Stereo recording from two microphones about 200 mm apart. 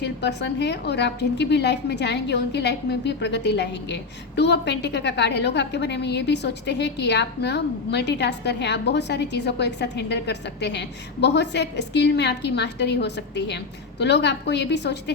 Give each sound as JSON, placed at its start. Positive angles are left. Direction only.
{"t": 0.0, "sound": "a woman's voice", "side_deg": 60}